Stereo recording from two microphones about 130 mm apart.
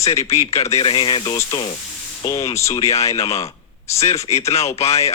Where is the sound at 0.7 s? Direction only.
40° left (ahead or behind).